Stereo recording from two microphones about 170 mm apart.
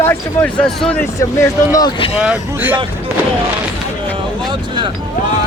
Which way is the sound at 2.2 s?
10° right (ahead or behind).